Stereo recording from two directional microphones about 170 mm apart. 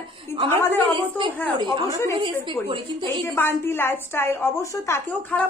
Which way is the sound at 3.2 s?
15° left (ahead or behind).